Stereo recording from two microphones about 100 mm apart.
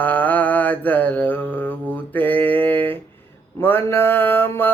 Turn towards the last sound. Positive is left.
turn(degrees=20)  # may be behind; listen again after turning